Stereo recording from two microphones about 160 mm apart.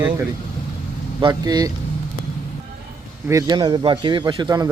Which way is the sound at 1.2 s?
25° right (ahead or behind).